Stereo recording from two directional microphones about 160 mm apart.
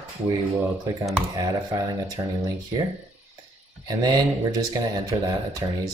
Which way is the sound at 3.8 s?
25° right (ahead or behind).